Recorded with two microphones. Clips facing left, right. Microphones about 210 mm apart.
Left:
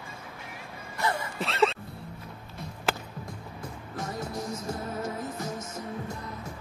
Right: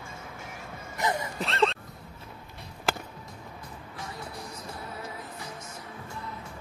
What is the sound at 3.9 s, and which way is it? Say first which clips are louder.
Music: left 7 dB; 45° left (ahead or behind).